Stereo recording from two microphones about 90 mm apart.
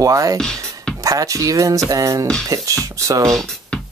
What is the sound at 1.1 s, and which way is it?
Speech, 40° right (ahead or behind).